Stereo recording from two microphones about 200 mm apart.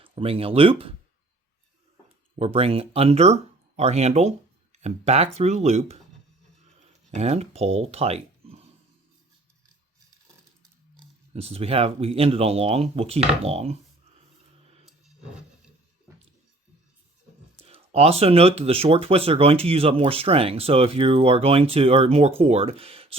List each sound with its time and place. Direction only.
0.0 s speech: 25° right (ahead or behind)
2.3 s speech: 30° right (ahead or behind)
7.2 s speech: 30° right (ahead or behind)
11.3 s speech: 30° right (ahead or behind)
17.6 s speech: 30° right (ahead or behind)